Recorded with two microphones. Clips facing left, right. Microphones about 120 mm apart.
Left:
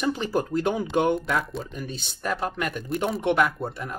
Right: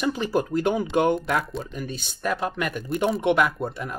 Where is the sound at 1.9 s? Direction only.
10° right (ahead or behind).